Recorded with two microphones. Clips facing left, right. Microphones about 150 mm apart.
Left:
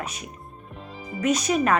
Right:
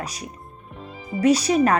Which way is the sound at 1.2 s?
35° right (ahead or behind).